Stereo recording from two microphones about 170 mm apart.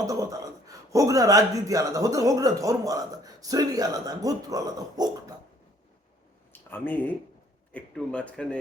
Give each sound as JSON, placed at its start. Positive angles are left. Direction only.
{"t": 0.0, "sound": "a man's voice", "side_deg": -20}
{"t": 6.5, "sound": "a sound", "side_deg": 10}
{"t": 7.7, "sound": "speech", "side_deg": 5}